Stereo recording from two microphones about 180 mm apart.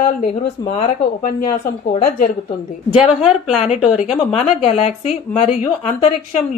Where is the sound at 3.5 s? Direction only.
35° left (ahead or behind).